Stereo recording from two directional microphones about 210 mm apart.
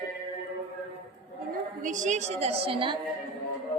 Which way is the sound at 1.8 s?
35° right (ahead or behind).